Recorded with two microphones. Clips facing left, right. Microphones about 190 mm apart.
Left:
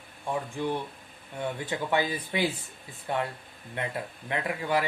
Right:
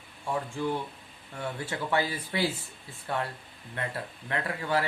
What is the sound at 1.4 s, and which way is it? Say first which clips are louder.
Speech: left 2 dB; 20° left (ahead or behind).